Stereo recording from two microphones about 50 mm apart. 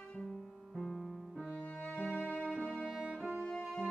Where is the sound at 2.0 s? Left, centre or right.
Left.